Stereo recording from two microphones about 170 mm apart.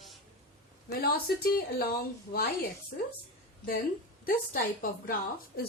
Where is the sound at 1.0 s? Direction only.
65° left (ahead or behind).